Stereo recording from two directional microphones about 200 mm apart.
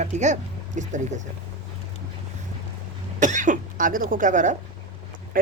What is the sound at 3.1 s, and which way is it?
Speech, 35° right (ahead or behind).